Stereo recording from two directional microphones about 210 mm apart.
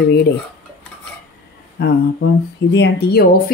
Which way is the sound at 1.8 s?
50° left (ahead or behind).